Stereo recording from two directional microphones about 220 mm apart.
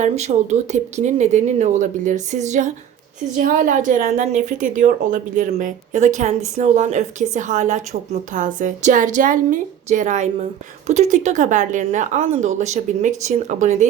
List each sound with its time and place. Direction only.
0.0 s a woman's voice: 30° right (ahead or behind)